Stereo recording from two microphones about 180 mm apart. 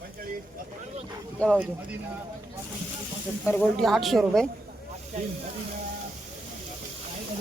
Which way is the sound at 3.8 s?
Centre (ahead or behind).